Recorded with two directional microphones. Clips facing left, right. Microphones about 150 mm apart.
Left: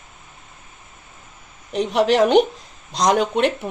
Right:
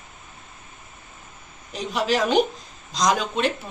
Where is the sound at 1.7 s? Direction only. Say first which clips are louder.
Left 6 dB; 65° left (ahead or behind).